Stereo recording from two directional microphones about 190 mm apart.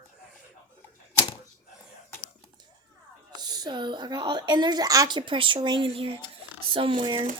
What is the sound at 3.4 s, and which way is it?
A woman's voice, 20° right (ahead or behind).